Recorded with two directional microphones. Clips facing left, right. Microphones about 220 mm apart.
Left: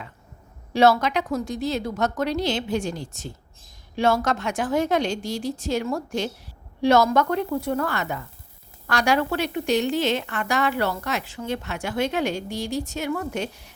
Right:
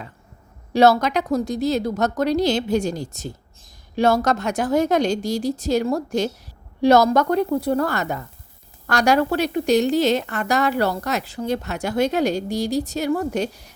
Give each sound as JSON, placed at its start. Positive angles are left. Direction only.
{"t": 0.7, "sound": "a woman's voice", "side_deg": -40}